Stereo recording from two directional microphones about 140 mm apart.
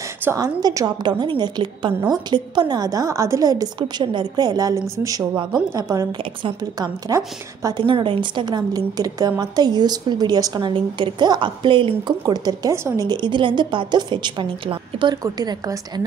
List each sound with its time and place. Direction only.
0.2 s a woman's voice: 15° right (ahead or behind)
7.8 s a woman's voice: 35° right (ahead or behind)